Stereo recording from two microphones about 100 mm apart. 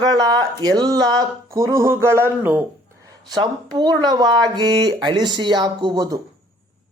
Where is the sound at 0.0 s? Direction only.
40° right (ahead or behind); by 2.6 s 20° right (ahead or behind).